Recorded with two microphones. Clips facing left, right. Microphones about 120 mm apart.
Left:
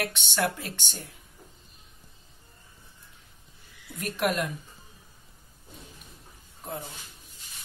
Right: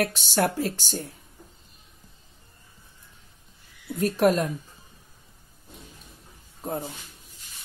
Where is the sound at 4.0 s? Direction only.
35° right (ahead or behind).